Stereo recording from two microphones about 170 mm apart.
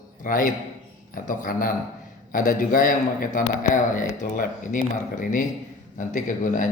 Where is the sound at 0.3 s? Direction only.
55° left (ahead or behind).